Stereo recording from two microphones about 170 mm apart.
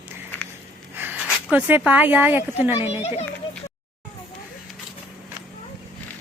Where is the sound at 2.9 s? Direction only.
40° left (ahead or behind).